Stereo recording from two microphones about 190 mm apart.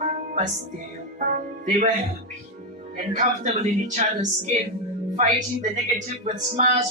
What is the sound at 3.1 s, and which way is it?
Speech, 40° right (ahead or behind).